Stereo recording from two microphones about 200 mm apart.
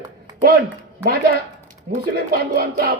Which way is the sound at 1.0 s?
45° right (ahead or behind).